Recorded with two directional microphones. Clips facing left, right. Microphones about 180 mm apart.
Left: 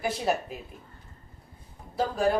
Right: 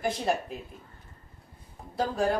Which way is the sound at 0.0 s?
5° left (ahead or behind).